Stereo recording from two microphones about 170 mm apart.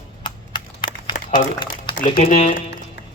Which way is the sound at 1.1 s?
50° left (ahead or behind).